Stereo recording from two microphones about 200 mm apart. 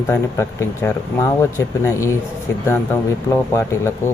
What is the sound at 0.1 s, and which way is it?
Speech, 10° left (ahead or behind).